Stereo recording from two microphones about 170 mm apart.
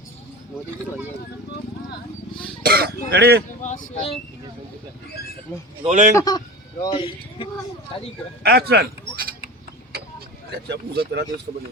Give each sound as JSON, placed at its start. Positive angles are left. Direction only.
{"t": 2.6, "sound": "a sound", "side_deg": -65}
{"t": 3.1, "sound": "speech", "side_deg": -80}
{"t": 3.6, "sound": "speech", "side_deg": 45}
{"t": 5.8, "sound": "a man's voice", "side_deg": -45}
{"t": 6.1, "sound": "a man's voice", "side_deg": 25}
{"t": 8.4, "sound": "speech", "side_deg": -70}
{"t": 10.7, "sound": "speech", "side_deg": -80}